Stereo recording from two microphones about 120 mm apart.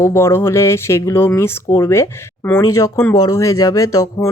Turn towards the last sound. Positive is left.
turn(degrees=25)  # may be behind; listen again after turning